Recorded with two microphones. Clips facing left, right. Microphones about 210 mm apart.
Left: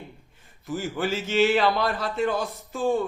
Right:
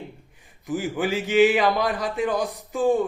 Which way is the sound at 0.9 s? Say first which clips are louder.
Right 4 dB; 15° right (ahead or behind).